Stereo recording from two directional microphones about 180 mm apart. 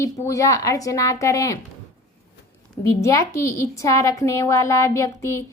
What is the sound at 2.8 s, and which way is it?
Speech, 15° left (ahead or behind).